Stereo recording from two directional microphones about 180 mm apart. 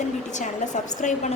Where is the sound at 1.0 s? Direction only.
45° left (ahead or behind).